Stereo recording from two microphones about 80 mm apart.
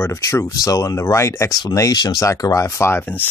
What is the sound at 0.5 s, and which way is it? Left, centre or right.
Speech, left.